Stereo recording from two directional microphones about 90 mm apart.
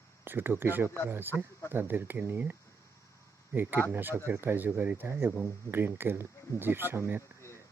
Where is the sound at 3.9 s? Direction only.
25° right (ahead or behind).